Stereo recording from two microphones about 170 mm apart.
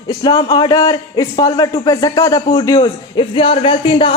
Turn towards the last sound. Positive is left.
turn(degrees=30)  # may be behind; listen again after turning